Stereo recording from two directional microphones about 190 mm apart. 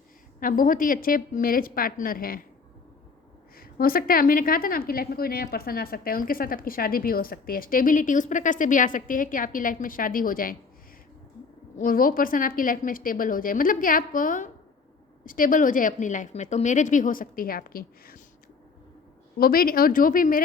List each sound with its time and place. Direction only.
0.3 s a woman's voice: 45° left (ahead or behind)
3.6 s a woman's voice: 50° left (ahead or behind)
11.8 s a woman's voice: 45° left (ahead or behind)
19.4 s a woman's voice: 50° left (ahead or behind)